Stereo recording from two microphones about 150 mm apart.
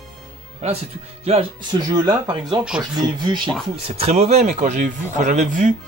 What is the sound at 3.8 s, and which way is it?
Speech, 45° right (ahead or behind).